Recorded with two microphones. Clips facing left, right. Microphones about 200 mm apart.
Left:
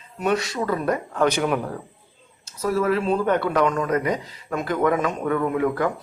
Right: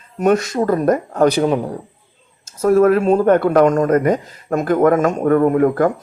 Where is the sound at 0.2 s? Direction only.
45° right (ahead or behind); by 1.8 s 25° right (ahead or behind).